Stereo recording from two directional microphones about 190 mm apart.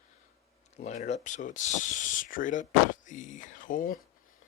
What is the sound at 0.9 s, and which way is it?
Speech, 35° left (ahead or behind).